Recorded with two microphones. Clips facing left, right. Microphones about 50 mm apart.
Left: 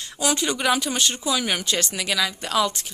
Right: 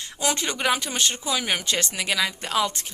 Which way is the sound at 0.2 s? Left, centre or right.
Right.